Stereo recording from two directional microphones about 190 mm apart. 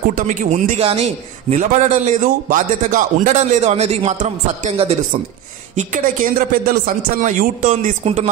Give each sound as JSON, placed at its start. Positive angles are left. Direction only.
{"t": 0.1, "sound": "a man's voice", "side_deg": -40}
{"t": 5.8, "sound": "speech", "side_deg": -50}
{"t": 8.0, "sound": "a man's voice", "side_deg": -30}